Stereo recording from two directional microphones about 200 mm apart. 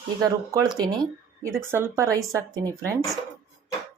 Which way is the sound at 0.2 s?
15° right (ahead or behind).